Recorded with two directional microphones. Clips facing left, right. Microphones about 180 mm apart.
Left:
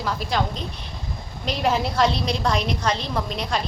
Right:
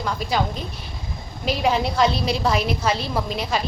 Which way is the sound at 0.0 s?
Centre (ahead or behind).